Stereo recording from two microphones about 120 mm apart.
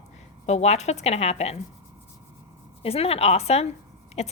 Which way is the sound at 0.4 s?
65° left (ahead or behind).